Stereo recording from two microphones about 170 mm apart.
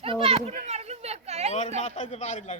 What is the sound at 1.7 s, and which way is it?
Speech, 40° left (ahead or behind).